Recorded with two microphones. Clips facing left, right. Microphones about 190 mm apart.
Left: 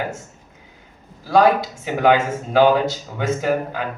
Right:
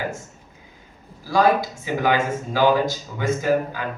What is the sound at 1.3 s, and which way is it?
Speech, 65° left (ahead or behind).